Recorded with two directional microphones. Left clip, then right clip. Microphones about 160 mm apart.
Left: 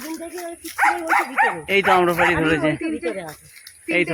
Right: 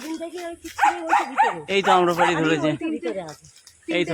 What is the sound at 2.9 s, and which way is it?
Speech, 5° right (ahead or behind).